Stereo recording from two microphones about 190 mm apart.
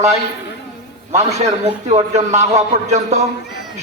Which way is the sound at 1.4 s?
30° right (ahead or behind).